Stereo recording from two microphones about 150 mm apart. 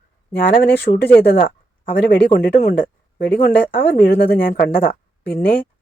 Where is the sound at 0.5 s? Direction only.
90° left.